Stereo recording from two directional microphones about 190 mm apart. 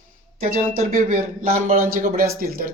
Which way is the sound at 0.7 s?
45° right (ahead or behind).